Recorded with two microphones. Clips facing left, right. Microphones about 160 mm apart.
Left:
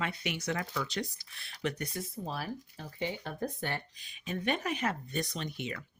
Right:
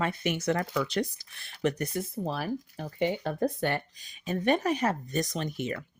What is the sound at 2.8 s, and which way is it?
Speech, 65° right (ahead or behind).